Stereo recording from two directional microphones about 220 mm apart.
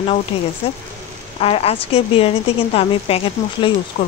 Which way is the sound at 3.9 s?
40° left (ahead or behind).